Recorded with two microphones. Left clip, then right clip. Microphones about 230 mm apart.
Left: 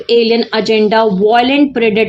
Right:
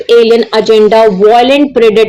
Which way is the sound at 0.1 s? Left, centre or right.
Left.